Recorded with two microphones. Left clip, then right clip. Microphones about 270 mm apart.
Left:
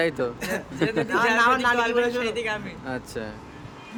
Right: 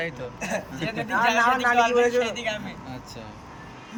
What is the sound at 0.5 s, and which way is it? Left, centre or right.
A man's voice, centre.